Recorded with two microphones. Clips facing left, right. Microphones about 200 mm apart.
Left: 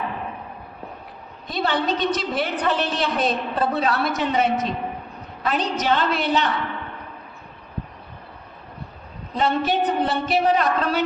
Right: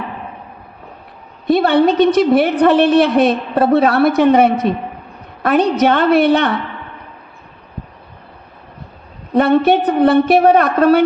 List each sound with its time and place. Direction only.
1.5 s a woman's voice: 60° right (ahead or behind)
9.3 s a woman's voice: 60° right (ahead or behind)